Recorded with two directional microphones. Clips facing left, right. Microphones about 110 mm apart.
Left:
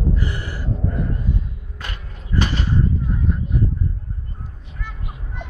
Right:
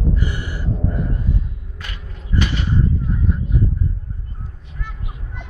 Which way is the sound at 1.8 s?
40° left (ahead or behind).